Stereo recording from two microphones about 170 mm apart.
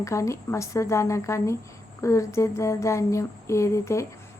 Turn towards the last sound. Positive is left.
turn(degrees=15)  # may be behind; listen again after turning